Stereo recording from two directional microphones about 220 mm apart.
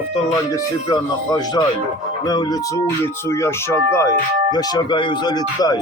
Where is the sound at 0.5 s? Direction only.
15° left (ahead or behind).